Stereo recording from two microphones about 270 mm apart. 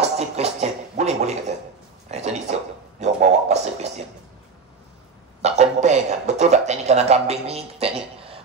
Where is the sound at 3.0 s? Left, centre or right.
Right.